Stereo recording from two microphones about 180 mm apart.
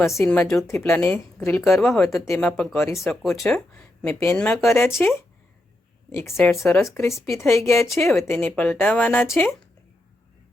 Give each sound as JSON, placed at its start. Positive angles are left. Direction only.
{"t": 0.0, "sound": "speech", "side_deg": 15}
{"t": 0.3, "sound": "speech", "side_deg": 5}
{"t": 1.7, "sound": "speech", "side_deg": 0}
{"t": 2.2, "sound": "speech", "side_deg": 15}
{"t": 2.5, "sound": "speech", "side_deg": 0}
{"t": 2.7, "sound": "speech", "side_deg": 15}
{"t": 3.0, "sound": "speech", "side_deg": 0}
{"t": 6.1, "sound": "speech", "side_deg": 15}